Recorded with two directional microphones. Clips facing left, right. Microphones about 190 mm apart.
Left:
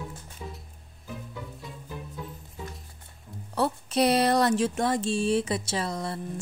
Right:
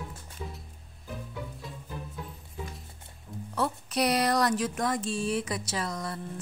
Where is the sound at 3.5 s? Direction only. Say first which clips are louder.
Left 4 dB; 30° left (ahead or behind).